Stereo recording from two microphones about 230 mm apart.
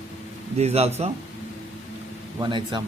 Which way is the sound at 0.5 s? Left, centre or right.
Right.